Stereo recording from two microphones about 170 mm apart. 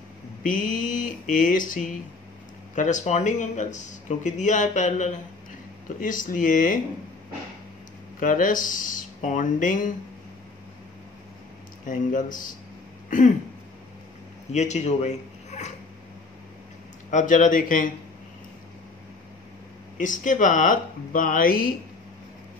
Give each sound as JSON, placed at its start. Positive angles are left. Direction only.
{"t": 0.4, "sound": "speech", "side_deg": 50}
{"t": 8.2, "sound": "speech", "side_deg": 50}
{"t": 11.8, "sound": "speech", "side_deg": 50}
{"t": 14.5, "sound": "speech", "side_deg": 40}
{"t": 17.1, "sound": "speech", "side_deg": 45}
{"t": 20.0, "sound": "speech", "side_deg": 50}